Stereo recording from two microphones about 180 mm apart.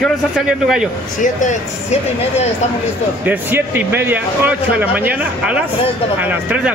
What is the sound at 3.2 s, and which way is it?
Speech, 10° right (ahead or behind).